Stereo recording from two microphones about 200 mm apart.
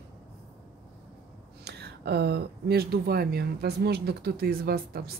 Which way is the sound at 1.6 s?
55° right (ahead or behind).